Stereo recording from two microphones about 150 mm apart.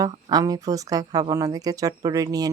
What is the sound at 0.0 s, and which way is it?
Speech, 25° right (ahead or behind).